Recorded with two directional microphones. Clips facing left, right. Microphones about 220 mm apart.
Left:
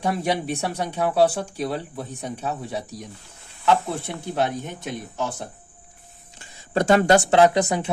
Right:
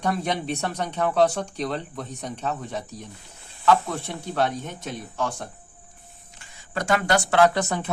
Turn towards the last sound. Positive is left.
turn(degrees=10)  # may be behind; listen again after turning